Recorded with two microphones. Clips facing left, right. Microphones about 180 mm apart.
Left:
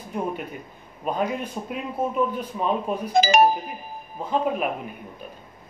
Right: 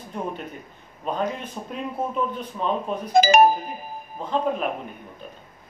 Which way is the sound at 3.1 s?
50° right (ahead or behind).